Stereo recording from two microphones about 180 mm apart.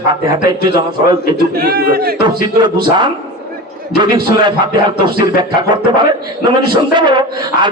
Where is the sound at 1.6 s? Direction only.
55° right (ahead or behind).